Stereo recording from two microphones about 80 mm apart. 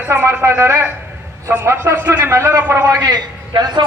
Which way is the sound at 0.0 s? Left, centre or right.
Right.